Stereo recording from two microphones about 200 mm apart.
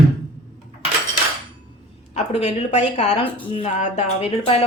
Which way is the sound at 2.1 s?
35° left (ahead or behind).